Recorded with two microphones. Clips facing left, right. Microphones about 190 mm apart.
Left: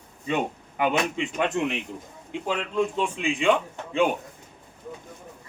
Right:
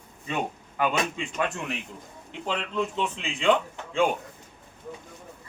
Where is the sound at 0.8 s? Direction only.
20° left (ahead or behind).